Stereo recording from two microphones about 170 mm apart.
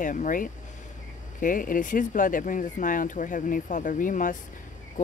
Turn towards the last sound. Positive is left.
turn(degrees=50)  # may be behind; listen again after turning